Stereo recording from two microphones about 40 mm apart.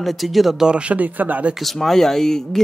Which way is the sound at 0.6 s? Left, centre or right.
Right.